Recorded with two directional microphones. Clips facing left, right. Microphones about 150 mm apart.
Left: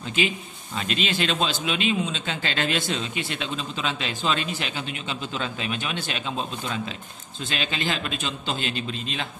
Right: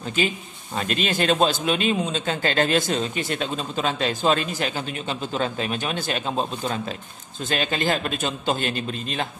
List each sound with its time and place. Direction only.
0.7 s a man's voice: 45° right (ahead or behind)